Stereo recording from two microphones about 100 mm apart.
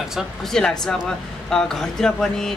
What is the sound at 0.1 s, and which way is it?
Speech, 5° left (ahead or behind).